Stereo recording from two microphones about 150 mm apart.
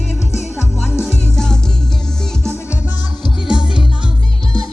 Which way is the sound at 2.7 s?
10° right (ahead or behind).